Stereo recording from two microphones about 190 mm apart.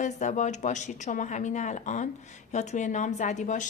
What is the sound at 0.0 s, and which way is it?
A woman's voice, 40° left (ahead or behind).